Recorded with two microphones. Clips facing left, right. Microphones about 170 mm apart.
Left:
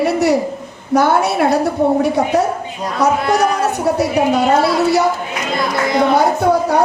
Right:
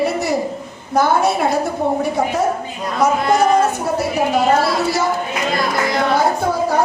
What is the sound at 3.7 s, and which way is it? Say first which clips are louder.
A woman's voice: left 4 dB; 65° left (ahead or behind).